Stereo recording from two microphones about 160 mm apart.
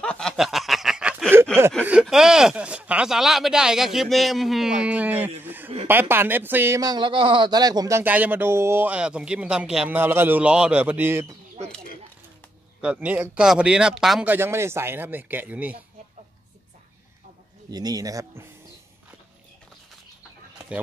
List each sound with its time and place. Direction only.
0.0 s snicker: 5° left (ahead or behind)
1.8 s speech: 5° right (ahead or behind)
5.4 s chuckle: 10° right (ahead or behind)
5.9 s speech: 15° right (ahead or behind)
8.0 s speech: 10° right (ahead or behind)
12.8 s speech: 10° right (ahead or behind)
14.3 s speech: 15° right (ahead or behind)
17.6 s speech: 25° right (ahead or behind)